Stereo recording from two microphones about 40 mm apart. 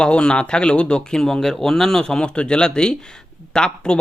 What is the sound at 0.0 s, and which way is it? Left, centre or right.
Speech, left.